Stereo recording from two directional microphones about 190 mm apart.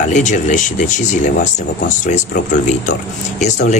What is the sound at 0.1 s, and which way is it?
Speech, 40° left (ahead or behind).